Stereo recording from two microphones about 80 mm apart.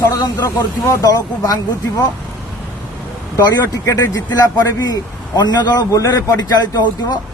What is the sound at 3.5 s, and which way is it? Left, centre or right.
Speech, left.